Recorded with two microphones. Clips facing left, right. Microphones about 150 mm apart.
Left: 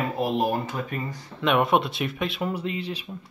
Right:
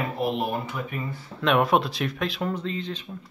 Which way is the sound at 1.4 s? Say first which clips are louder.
Even; centre (ahead or behind).